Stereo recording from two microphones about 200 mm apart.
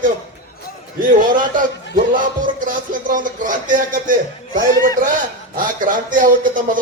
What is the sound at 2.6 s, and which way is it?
A man's voice, 40° right (ahead or behind).